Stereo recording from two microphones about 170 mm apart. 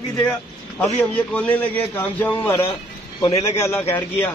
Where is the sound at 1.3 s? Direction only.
10° left (ahead or behind).